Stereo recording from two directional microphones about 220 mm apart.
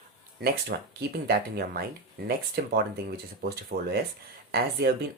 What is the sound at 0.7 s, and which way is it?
Speech, 45° right (ahead or behind).